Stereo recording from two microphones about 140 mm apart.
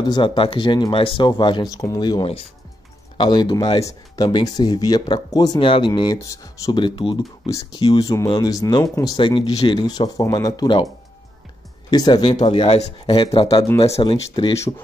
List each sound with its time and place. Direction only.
0.0 s speech: 35° left (ahead or behind)
6.1 s speech: 25° left (ahead or behind)
11.9 s speech: 30° left (ahead or behind)
12.4 s speech: 45° left (ahead or behind)